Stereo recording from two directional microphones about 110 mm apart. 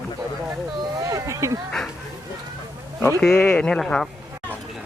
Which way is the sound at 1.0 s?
30° right (ahead or behind).